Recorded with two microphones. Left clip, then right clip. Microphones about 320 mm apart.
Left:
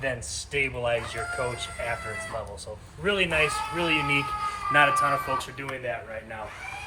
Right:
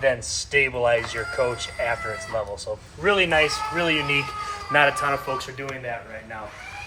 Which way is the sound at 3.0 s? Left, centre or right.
Right.